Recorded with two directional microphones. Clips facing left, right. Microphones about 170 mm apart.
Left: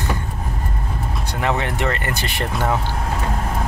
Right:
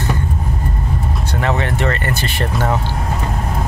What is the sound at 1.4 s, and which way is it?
Vehicle, 10° left (ahead or behind).